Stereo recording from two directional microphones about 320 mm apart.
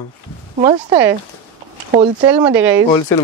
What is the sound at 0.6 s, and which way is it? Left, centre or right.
Speech, centre.